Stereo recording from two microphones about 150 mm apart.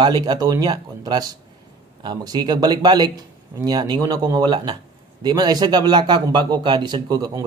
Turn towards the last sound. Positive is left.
turn(degrees=-25)  # may be behind; listen again after turning